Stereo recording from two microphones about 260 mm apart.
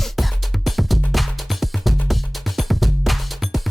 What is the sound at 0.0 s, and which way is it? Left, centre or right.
Music, centre.